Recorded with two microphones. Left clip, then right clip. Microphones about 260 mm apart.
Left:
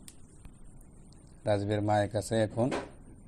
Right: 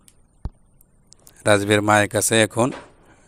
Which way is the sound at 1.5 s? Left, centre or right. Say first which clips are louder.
Right 13 dB; right.